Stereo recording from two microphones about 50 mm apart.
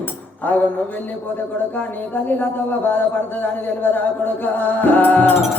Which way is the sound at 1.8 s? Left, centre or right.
Left.